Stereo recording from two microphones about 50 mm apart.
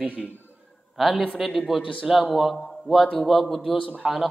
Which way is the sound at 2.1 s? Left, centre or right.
Centre.